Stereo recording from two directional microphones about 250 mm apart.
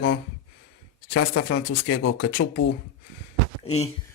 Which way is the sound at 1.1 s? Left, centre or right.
Left.